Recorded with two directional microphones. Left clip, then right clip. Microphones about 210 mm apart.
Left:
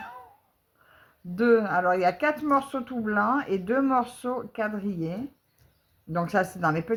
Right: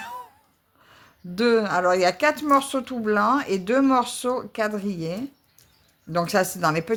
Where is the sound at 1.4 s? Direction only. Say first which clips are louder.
Right 2 dB; 40° right (ahead or behind).